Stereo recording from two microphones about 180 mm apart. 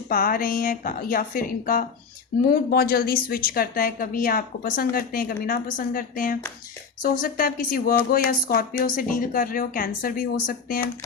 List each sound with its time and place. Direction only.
0.1 s speech: 50° left (ahead or behind)